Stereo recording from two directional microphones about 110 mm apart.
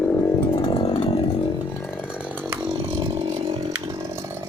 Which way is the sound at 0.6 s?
55° left (ahead or behind).